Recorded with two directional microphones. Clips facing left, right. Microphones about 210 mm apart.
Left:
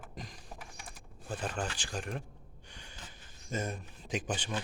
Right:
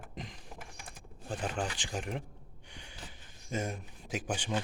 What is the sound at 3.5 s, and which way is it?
Speech, 15° right (ahead or behind).